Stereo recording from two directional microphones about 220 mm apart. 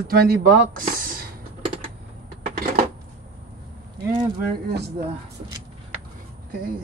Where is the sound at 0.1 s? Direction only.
45° right (ahead or behind).